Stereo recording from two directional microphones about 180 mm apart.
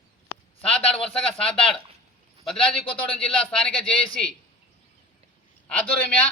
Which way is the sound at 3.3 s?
5° left (ahead or behind).